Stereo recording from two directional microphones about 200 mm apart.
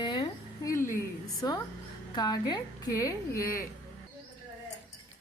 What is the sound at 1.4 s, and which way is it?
A woman's voice, 15° left (ahead or behind).